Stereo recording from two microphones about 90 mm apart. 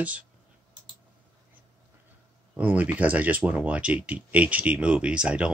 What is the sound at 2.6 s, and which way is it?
Speech, 20° right (ahead or behind).